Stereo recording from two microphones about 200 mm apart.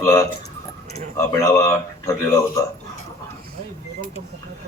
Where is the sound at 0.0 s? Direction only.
15° left (ahead or behind).